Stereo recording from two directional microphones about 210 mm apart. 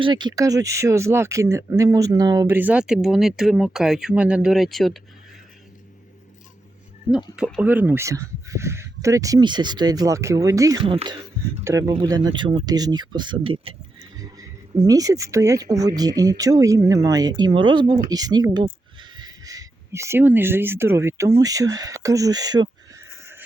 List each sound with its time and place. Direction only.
0.0 s speech: 20° right (ahead or behind); by 5.0 s centre (ahead or behind)
7.3 s speech: 5° right (ahead or behind)